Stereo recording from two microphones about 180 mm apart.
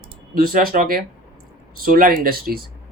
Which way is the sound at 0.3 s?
55° right (ahead or behind).